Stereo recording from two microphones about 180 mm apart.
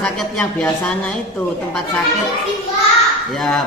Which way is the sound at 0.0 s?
5° left (ahead or behind).